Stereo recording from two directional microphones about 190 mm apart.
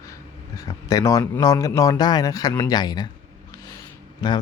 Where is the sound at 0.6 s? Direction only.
20° left (ahead or behind).